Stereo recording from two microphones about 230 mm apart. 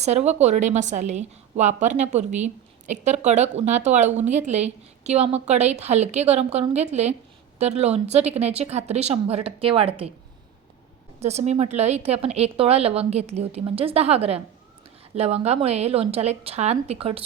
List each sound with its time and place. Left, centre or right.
0.0 s a woman's voice: right
11.2 s a woman's voice: right